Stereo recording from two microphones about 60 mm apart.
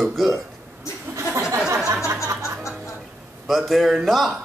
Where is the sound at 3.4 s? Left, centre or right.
Centre.